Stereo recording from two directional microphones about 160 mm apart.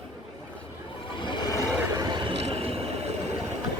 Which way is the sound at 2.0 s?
30° right (ahead or behind).